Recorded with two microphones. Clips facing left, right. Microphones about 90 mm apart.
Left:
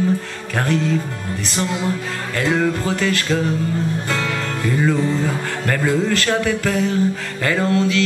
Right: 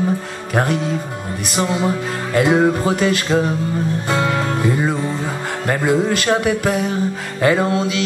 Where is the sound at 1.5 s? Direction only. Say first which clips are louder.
Right 4 dB; 20° right (ahead or behind).